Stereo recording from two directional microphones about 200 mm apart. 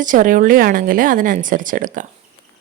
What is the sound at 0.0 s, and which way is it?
A woman's voice, 40° right (ahead or behind).